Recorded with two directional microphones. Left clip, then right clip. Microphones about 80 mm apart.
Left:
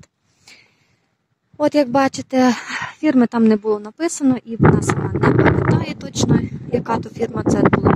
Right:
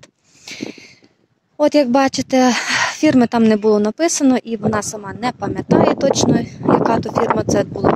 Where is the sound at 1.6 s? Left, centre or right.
Right.